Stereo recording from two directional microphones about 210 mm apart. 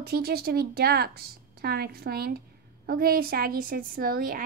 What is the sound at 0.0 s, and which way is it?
A woman's voice, 50° right (ahead or behind).